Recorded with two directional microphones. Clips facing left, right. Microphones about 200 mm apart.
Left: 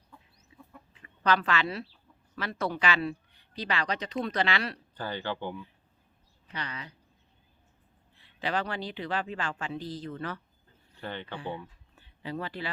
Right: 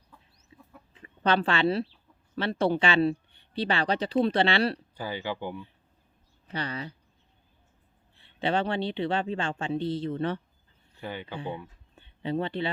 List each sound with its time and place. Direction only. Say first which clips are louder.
0.5 s chicken: left 1 dB; 30° right (ahead or behind)
1.0 s speech: right 2 dB; 30° right (ahead or behind)
4.9 s speech: right 1 dB; 10° right (ahead or behind)
6.5 s speech: right 6 dB; 30° right (ahead or behind)
8.1 s speech: right 4 dB; 30° right (ahead or behind)
11.0 s speech: right 1 dB; 10° right (ahead or behind)
11.3 s speech: right 2 dB; 25° right (ahead or behind)